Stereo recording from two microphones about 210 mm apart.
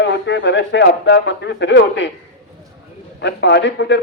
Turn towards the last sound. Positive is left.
turn(degrees=55)  # may be behind; listen again after turning